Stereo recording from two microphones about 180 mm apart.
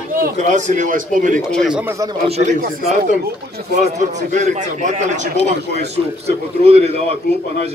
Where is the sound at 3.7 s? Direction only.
40° right (ahead or behind).